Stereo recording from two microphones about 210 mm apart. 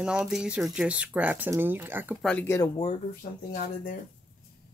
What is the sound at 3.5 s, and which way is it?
Speech, 40° left (ahead or behind).